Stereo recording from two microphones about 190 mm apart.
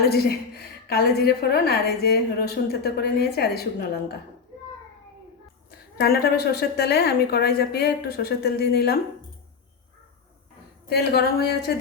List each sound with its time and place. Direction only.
0.1 s a woman's voice: 55° left (ahead or behind)
6.0 s a woman's voice: 55° left (ahead or behind)
10.8 s a woman's voice: 55° left (ahead or behind)